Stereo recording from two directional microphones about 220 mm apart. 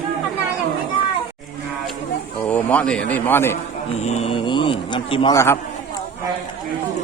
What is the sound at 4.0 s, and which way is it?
Speech, 30° left (ahead or behind).